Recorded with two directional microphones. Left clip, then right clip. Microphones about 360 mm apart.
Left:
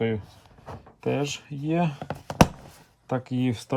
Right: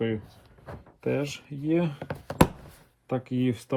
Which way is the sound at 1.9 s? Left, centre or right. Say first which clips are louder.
Left 2 dB; centre.